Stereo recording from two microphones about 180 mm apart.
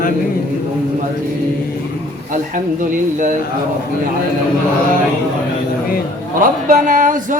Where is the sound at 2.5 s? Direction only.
45° right (ahead or behind).